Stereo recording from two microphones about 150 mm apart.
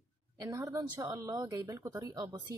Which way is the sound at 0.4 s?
25° right (ahead or behind).